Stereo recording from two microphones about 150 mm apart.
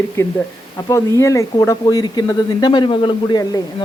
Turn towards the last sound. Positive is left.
turn(degrees=30)  # may be behind; listen again after turning